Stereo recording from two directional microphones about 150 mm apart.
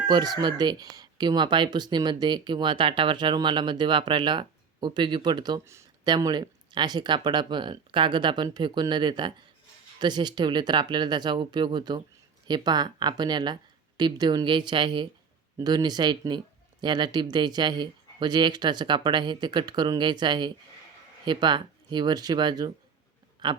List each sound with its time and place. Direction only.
0.1 s speech: 25° right (ahead or behind)